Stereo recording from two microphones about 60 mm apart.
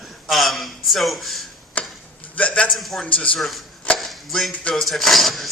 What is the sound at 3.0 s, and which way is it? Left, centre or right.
Speech, centre.